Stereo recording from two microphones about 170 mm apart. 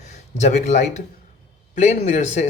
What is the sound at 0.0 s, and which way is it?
Speech, 40° left (ahead or behind).